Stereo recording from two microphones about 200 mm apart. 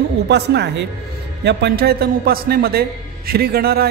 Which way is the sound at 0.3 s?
55° right (ahead or behind).